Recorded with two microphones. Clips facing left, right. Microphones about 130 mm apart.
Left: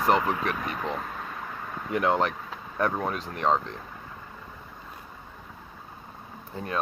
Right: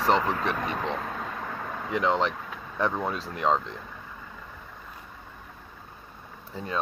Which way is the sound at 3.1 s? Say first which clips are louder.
Even; 30° right (ahead or behind).